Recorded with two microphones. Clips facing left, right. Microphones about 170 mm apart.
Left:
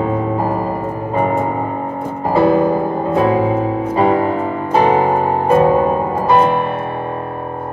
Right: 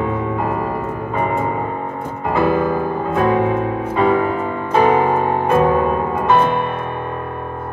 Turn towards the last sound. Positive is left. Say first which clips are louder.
# left 2 dB
turn(degrees=35)  # may be behind; listen again after turning